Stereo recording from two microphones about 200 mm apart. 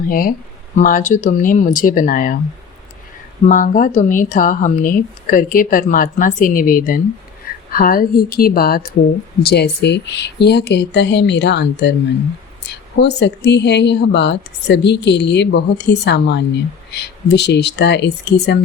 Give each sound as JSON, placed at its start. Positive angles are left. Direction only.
{"t": 0.1, "sound": "speech", "side_deg": 45}
{"t": 3.4, "sound": "a woman's voice", "side_deg": 40}